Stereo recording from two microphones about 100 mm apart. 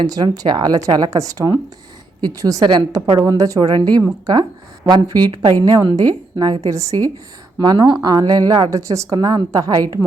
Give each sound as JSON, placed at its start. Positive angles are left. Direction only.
{"t": 0.0, "sound": "a woman's voice", "side_deg": -40}
{"t": 3.2, "sound": "a woman's voice", "side_deg": -35}
{"t": 3.6, "sound": "a woman's voice", "side_deg": -50}
{"t": 7.6, "sound": "a woman's voice", "side_deg": -45}
{"t": 8.7, "sound": "a woman's voice", "side_deg": -30}